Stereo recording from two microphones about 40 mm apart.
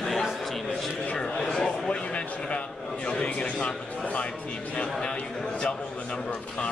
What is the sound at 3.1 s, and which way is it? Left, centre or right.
Speech, left.